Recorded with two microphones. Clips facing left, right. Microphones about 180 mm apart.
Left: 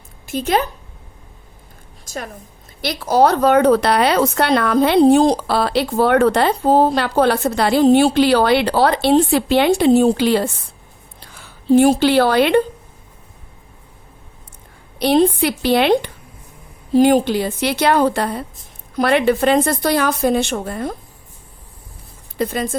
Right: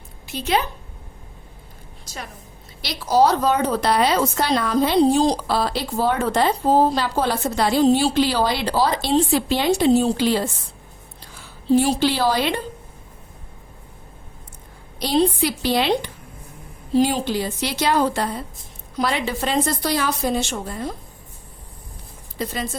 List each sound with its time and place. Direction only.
0.3 s speech: 45° left (ahead or behind)
2.0 s a woman's voice: 50° left (ahead or behind); by 10.5 s 65° left (ahead or behind)
11.7 s a woman's voice: 55° left (ahead or behind)
14.9 s a woman's voice: 60° left (ahead or behind)
22.4 s speech: 55° left (ahead or behind)